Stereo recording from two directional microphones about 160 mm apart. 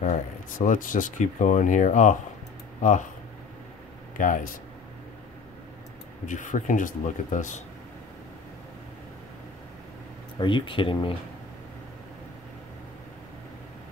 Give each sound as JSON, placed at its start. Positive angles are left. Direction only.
{"t": 0.0, "sound": "speech", "side_deg": 50}
{"t": 4.2, "sound": "speech", "side_deg": 55}
{"t": 6.2, "sound": "speech", "side_deg": 50}
{"t": 10.4, "sound": "speech", "side_deg": 30}